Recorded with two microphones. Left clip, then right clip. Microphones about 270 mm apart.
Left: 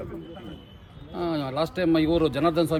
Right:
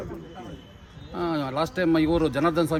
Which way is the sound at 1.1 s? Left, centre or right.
Centre.